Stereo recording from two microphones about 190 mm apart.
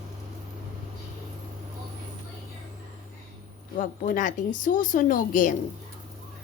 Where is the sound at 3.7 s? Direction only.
45° left (ahead or behind).